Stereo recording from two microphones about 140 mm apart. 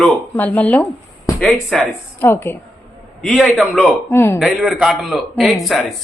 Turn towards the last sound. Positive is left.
turn(degrees=0)  # may be behind; listen again after turning